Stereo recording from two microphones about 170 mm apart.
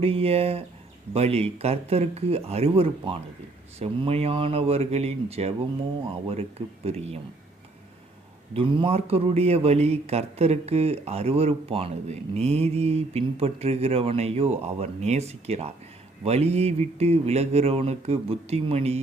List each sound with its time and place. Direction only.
0.0 s a man's voice: 35° right (ahead or behind)
6.8 s a man's voice: 35° right (ahead or behind)
8.5 s a man's voice: 30° right (ahead or behind)